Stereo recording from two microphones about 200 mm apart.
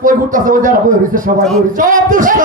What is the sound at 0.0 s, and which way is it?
Speech, 40° right (ahead or behind).